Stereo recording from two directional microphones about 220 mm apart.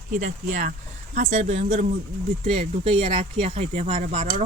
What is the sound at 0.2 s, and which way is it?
Speech, 35° right (ahead or behind).